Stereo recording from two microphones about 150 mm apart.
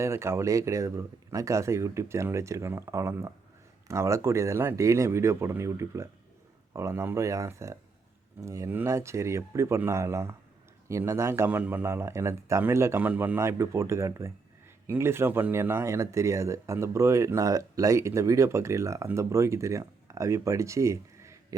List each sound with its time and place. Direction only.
0.0 s speech: 15° right (ahead or behind)